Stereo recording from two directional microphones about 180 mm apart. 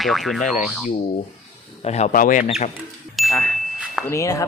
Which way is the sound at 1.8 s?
35° left (ahead or behind).